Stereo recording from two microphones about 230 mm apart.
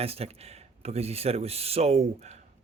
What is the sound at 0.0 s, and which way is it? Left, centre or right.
Speech, right.